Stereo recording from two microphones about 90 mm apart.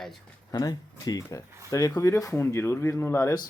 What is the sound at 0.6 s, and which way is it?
Speech, 45° left (ahead or behind).